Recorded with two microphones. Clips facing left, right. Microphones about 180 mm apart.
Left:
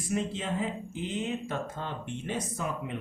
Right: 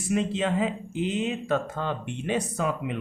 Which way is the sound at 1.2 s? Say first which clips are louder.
Right 4 dB; 80° right.